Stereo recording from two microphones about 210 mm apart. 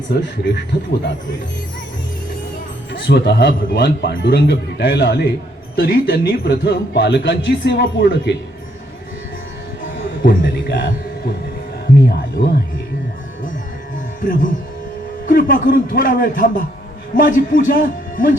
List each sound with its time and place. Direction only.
0.1 s speech: 55° left (ahead or behind)
2.9 s speech: 55° left (ahead or behind)
10.2 s music: 45° left (ahead or behind)
12.4 s music: 40° left (ahead or behind)
14.2 s a man's voice: 40° left (ahead or behind)